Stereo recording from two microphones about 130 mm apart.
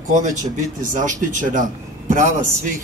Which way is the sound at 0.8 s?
75° right (ahead or behind).